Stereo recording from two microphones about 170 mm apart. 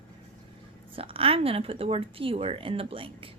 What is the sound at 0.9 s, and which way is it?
A woman's voice, 35° right (ahead or behind).